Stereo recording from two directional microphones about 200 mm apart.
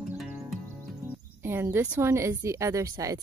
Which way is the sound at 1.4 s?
10° right (ahead or behind).